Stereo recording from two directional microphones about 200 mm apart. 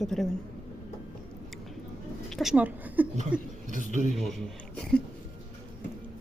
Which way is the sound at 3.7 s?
40° right (ahead or behind).